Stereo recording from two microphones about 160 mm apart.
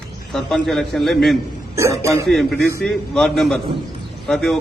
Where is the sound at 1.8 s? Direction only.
20° right (ahead or behind).